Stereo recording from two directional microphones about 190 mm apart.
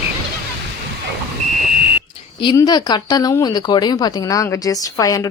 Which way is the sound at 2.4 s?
20° left (ahead or behind).